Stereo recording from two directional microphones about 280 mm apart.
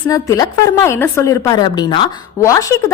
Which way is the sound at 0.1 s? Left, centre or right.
Centre.